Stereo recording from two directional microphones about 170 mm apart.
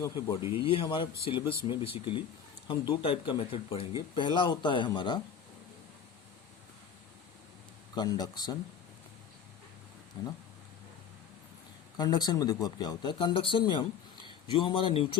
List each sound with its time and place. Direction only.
0.6 s speech: 30° left (ahead or behind)
7.9 s speech: 25° left (ahead or behind)
10.2 s speech: 25° left (ahead or behind)
11.9 s speech: 25° left (ahead or behind)